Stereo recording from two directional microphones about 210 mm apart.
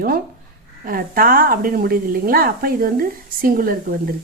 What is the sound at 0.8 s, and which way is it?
A woman's voice, 45° right (ahead or behind).